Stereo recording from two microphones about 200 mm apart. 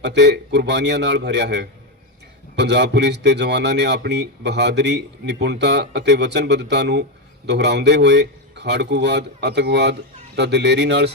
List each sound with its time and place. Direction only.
0.0 s speech: 60° right (ahead or behind)